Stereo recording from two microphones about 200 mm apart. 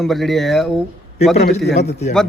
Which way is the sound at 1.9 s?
35° left (ahead or behind).